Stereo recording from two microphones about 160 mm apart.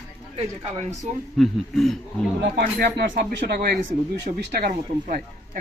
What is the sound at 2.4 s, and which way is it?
Speech, 90° right.